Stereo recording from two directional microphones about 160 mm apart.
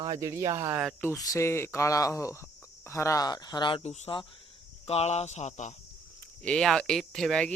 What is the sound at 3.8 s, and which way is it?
Speech, 40° left (ahead or behind).